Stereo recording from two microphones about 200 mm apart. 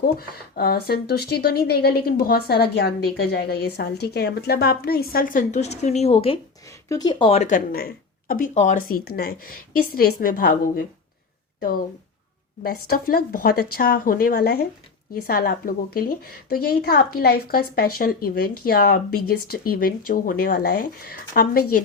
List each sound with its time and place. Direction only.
0.0 s speech: 50° left (ahead or behind); by 6.4 s 30° left (ahead or behind)
6.7 s speech: 15° left (ahead or behind); by 10.8 s 45° left (ahead or behind)
12.6 s speech: 50° left (ahead or behind)